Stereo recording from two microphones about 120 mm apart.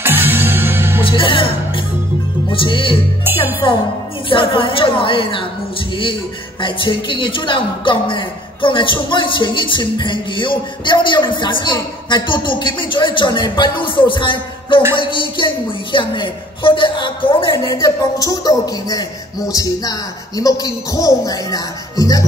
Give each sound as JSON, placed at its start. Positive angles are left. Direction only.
{"t": 0.0, "sound": "music", "side_deg": -20}
{"t": 1.0, "sound": "speech", "side_deg": 45}
{"t": 2.5, "sound": "speech", "side_deg": 45}
{"t": 6.6, "sound": "speech", "side_deg": 45}
{"t": 17.6, "sound": "a man's voice", "side_deg": 30}